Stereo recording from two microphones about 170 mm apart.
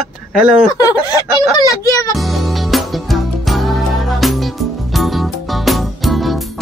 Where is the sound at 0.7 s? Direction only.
20° left (ahead or behind).